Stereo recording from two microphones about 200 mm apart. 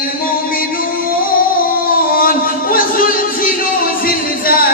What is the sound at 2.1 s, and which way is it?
Music, 45° left (ahead or behind).